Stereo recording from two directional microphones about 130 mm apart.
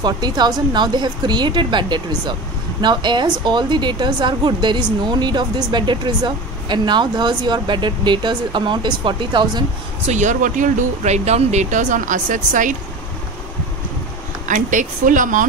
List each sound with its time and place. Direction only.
0.0 s a woman's voice: 30° right (ahead or behind)
10.0 s speech: 65° right (ahead or behind)
14.5 s speech: 80° right